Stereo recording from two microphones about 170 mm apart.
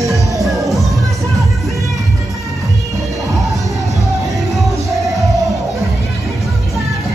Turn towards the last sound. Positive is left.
turn(degrees=0)  # may be behind; listen again after turning